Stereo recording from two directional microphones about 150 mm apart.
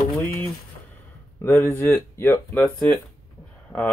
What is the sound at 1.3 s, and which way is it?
Speech, 15° left (ahead or behind).